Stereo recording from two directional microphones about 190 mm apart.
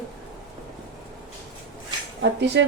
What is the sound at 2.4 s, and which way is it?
Speech, 65° right (ahead or behind).